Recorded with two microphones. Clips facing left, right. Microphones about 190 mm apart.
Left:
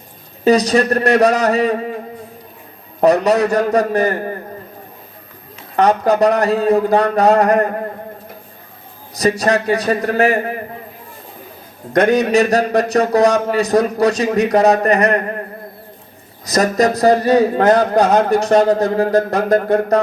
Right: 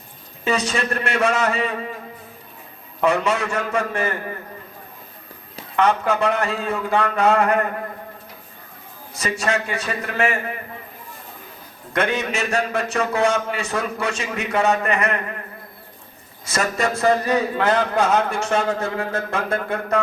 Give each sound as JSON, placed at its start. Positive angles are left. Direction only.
{"t": 0.4, "sound": "a man's voice", "side_deg": 40}
{"t": 3.0, "sound": "a man's voice", "side_deg": 40}
{"t": 5.7, "sound": "a man's voice", "side_deg": 40}
{"t": 9.1, "sound": "a man's voice", "side_deg": 40}
{"t": 11.9, "sound": "a man's voice", "side_deg": 40}
{"t": 16.5, "sound": "a man's voice", "side_deg": 40}